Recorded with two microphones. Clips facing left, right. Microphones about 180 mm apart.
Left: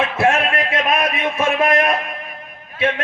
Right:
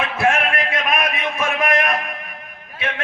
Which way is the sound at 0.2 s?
25° left (ahead or behind).